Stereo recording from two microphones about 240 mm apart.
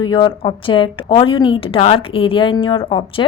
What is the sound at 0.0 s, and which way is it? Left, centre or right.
A woman's voice, centre.